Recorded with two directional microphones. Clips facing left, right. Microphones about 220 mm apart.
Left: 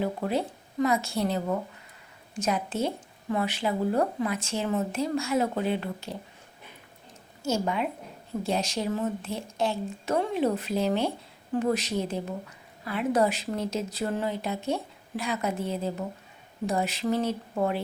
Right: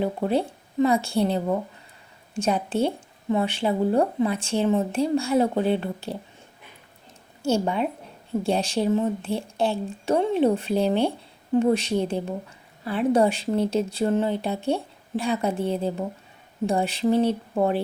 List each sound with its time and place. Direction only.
0.0 s speech: 30° right (ahead or behind)
2.4 s a woman's voice: 30° right (ahead or behind)
7.4 s a woman's voice: 30° right (ahead or behind)